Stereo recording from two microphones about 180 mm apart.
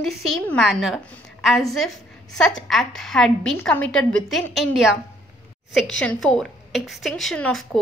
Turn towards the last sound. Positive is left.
turn(degrees=5)  # may be behind; listen again after turning